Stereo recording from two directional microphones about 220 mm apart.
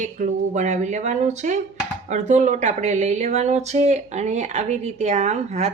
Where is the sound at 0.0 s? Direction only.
35° right (ahead or behind).